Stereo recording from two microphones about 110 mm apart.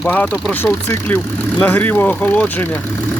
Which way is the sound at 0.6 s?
20° left (ahead or behind).